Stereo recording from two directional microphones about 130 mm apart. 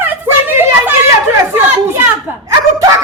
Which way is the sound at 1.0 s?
15° right (ahead or behind).